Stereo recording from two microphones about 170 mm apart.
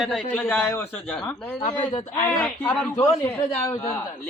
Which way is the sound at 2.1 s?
20° left (ahead or behind).